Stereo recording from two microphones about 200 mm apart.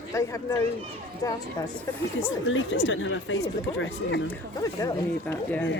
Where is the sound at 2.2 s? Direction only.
70° left (ahead or behind).